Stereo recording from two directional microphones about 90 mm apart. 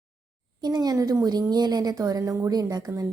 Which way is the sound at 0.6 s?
50° right (ahead or behind).